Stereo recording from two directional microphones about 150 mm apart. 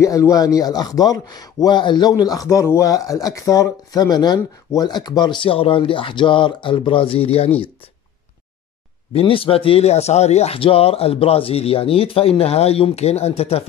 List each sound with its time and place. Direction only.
0.0 s a man's voice: 20° left (ahead or behind); by 7.5 s 40° left (ahead or behind)
9.1 s speech: 35° left (ahead or behind)